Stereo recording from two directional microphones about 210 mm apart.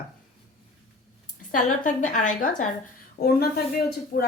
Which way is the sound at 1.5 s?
35° left (ahead or behind).